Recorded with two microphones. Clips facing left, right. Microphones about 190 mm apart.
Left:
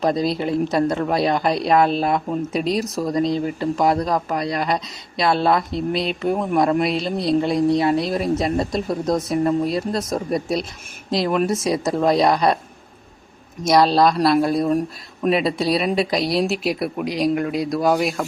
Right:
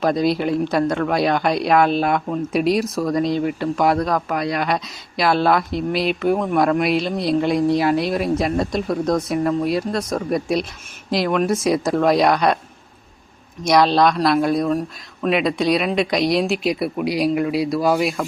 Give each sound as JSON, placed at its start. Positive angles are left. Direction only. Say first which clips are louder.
{"t": 0.0, "sound": "speech", "louder": "right 2 dB", "side_deg": 0}
{"t": 13.7, "sound": "speech", "louder": "even", "side_deg": 0}
{"t": 15.3, "sound": "speech", "louder": "even", "side_deg": 30}
{"t": 15.5, "sound": "speech", "louder": "right 1 dB", "side_deg": 5}